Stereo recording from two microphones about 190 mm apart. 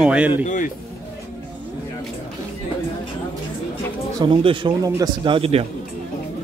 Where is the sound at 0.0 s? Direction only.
5° right (ahead or behind).